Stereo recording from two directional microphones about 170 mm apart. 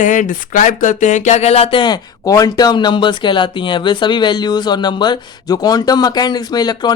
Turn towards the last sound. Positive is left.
turn(degrees=25)  # may be behind; listen again after turning